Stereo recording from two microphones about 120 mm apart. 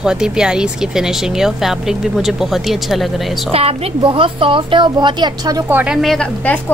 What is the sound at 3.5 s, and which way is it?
A woman's voice, 55° right (ahead or behind).